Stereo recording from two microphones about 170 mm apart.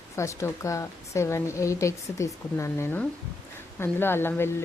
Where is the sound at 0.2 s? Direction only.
15° left (ahead or behind).